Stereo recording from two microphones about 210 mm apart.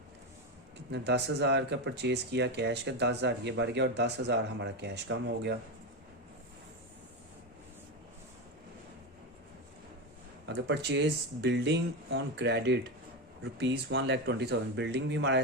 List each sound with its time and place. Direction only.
0.9 s speech: 55° right (ahead or behind)
10.4 s speech: 55° right (ahead or behind)